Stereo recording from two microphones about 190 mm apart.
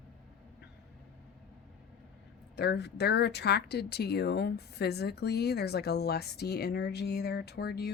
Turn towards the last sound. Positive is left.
turn(degrees=55)  # may be behind; listen again after turning